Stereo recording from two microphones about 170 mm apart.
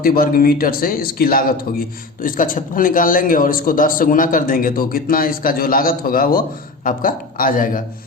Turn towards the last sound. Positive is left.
turn(degrees=55)  # may be behind; listen again after turning